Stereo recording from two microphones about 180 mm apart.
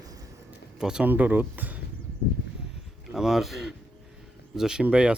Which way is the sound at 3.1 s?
Centre (ahead or behind).